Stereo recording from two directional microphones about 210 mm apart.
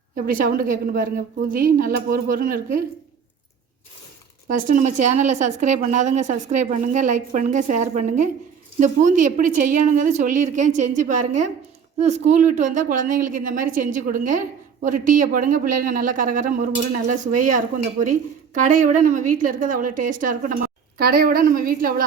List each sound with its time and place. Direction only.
0.3 s speech: 40° right (ahead or behind)
4.4 s a woman's voice: 40° right (ahead or behind)